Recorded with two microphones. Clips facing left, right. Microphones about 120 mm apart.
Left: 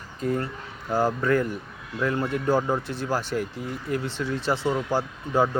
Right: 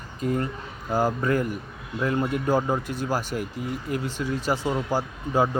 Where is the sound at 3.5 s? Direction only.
40° left (ahead or behind).